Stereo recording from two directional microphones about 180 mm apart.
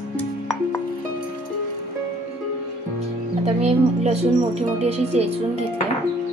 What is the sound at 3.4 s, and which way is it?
Speech, 35° right (ahead or behind).